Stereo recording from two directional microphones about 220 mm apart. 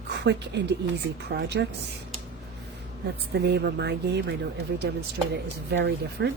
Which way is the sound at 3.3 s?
50° right (ahead or behind).